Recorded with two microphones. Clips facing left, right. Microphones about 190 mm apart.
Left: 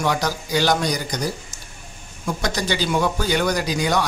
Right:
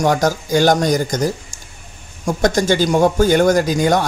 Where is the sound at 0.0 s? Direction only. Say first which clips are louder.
Right 7 dB; 45° right (ahead or behind).